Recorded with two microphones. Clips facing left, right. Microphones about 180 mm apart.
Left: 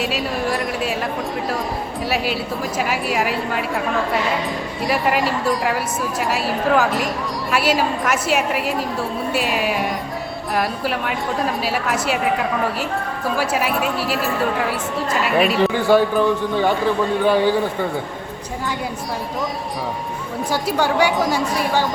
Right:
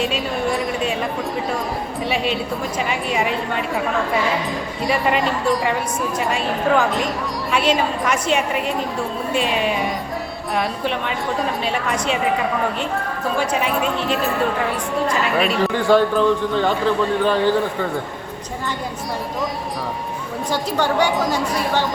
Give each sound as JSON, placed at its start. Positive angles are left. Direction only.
{"t": 0.0, "sound": "a sound", "side_deg": 0}
{"t": 2.0, "sound": "a woman's voice", "side_deg": 5}
{"t": 15.4, "sound": "a man's voice", "side_deg": 5}
{"t": 20.5, "sound": "a man's voice", "side_deg": 10}